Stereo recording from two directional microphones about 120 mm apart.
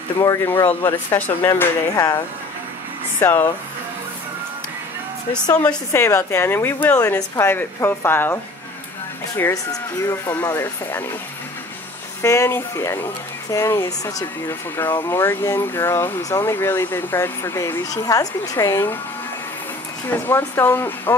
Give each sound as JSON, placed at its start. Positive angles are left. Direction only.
{"t": 0.5, "sound": "speech", "side_deg": 20}
{"t": 3.2, "sound": "a woman's voice", "side_deg": 15}
{"t": 5.3, "sound": "a woman's voice", "side_deg": 10}
{"t": 5.9, "sound": "a woman's voice", "side_deg": 25}
{"t": 9.5, "sound": "speech", "side_deg": 25}
{"t": 12.2, "sound": "speech", "side_deg": 25}
{"t": 20.1, "sound": "a woman's voice", "side_deg": 20}